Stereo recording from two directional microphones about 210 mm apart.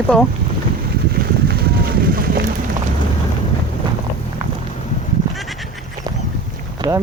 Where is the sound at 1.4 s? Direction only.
45° right (ahead or behind).